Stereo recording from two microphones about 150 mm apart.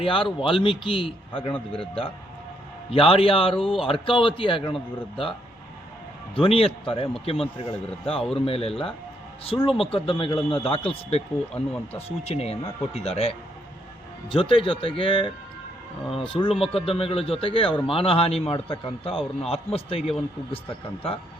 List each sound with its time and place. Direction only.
0.0 s a man's voice: 35° left (ahead or behind)
1.5 s speech: 5° left (ahead or behind)
2.9 s a man's voice: 40° left (ahead or behind)
6.3 s a man's voice: 35° left (ahead or behind)
8.2 s speech: 5° left (ahead or behind)
8.4 s a man's voice: 40° left (ahead or behind)
11.5 s speech: 10° left (ahead or behind)
11.9 s a man's voice: 45° left (ahead or behind)